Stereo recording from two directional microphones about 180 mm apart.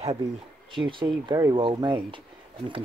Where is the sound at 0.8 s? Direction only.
25° right (ahead or behind).